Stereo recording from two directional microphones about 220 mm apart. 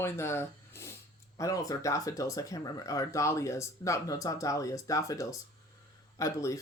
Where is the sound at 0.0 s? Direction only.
10° left (ahead or behind).